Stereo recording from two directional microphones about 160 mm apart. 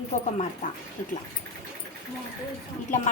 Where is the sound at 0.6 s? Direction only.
50° left (ahead or behind).